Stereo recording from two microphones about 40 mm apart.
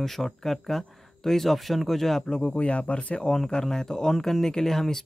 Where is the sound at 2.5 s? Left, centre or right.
Left.